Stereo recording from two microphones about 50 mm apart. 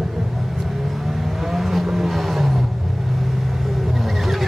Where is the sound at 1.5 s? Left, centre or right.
Centre.